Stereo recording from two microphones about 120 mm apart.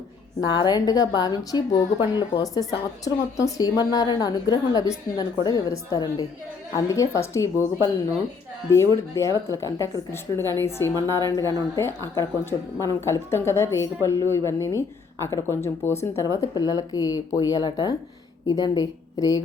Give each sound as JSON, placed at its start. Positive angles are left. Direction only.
{"t": 0.4, "sound": "a woman's voice", "side_deg": 35}
{"t": 8.7, "sound": "a woman's voice", "side_deg": 25}